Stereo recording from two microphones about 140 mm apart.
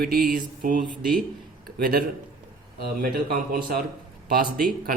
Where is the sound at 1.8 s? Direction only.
90° right.